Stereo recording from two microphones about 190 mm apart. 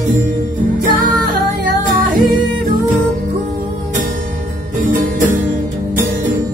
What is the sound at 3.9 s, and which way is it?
Music, 40° right (ahead or behind).